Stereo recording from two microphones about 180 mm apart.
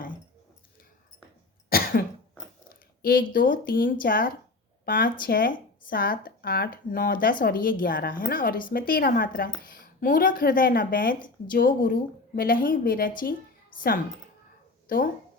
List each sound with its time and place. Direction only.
1.7 s cough: 55° left (ahead or behind)
2.6 s a sound: 55° left (ahead or behind)
3.3 s speech: 50° left (ahead or behind)